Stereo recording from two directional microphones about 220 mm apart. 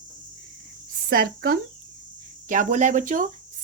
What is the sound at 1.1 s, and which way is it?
Speech, 40° right (ahead or behind).